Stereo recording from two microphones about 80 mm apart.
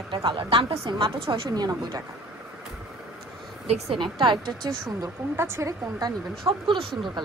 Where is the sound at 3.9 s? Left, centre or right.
Right.